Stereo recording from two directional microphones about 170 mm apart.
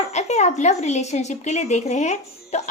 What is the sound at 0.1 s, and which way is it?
Speech, 40° left (ahead or behind).